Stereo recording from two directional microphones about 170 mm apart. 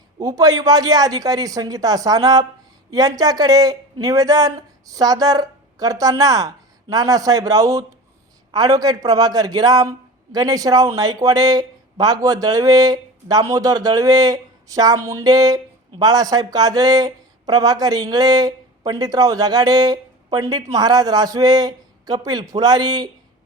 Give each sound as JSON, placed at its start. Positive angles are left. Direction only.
{"t": 0.2, "sound": "speech", "side_deg": -20}